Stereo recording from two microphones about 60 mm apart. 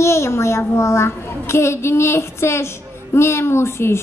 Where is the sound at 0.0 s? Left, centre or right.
Left.